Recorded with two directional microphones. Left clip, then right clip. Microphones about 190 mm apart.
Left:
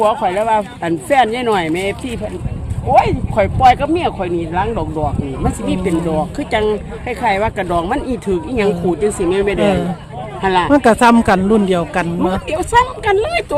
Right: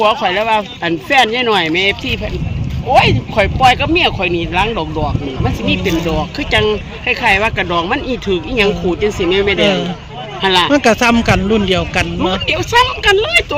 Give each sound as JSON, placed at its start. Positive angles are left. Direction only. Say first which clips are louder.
{"t": 0.0, "sound": "speech", "louder": "right 1 dB", "side_deg": 5}